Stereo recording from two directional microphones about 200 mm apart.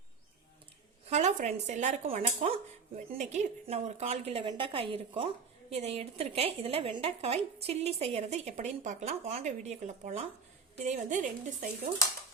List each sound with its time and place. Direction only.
1.0 s a woman's voice: 35° right (ahead or behind)